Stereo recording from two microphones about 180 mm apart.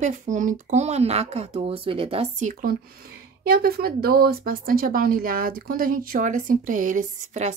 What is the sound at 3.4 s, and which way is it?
Speech, 60° right (ahead or behind).